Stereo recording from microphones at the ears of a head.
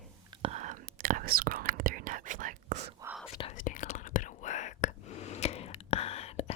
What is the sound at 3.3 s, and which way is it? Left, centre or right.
Whispering, left.